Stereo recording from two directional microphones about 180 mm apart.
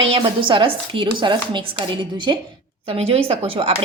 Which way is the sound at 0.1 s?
30° right (ahead or behind).